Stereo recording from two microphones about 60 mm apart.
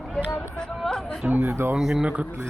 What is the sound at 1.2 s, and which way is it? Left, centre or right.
Speech, right.